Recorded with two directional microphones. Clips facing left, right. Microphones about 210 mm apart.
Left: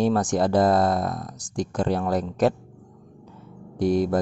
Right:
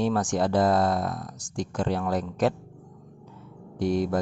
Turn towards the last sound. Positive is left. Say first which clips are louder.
# left 4 dB
turn(degrees=40)  # may be behind; listen again after turning